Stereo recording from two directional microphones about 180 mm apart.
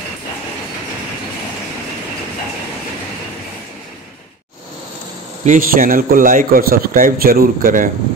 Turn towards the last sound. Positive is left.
turn(degrees=-50)  # may be behind; listen again after turning